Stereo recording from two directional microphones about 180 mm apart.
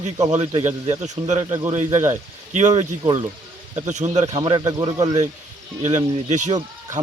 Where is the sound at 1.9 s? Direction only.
15° right (ahead or behind).